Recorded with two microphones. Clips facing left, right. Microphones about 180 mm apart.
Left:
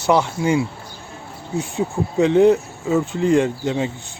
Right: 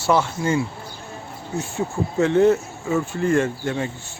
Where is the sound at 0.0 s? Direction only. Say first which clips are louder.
Left 2 dB; 15° left (ahead or behind).